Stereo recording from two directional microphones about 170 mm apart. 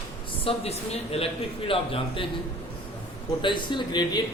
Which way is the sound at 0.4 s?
35° left (ahead or behind).